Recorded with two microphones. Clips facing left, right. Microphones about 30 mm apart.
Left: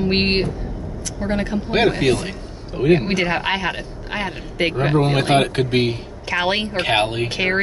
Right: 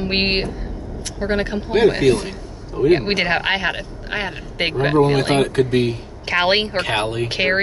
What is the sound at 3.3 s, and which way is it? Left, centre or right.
Speech, centre.